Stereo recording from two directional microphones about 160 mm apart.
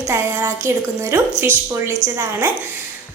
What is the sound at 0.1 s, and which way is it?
A woman's voice, 15° right (ahead or behind).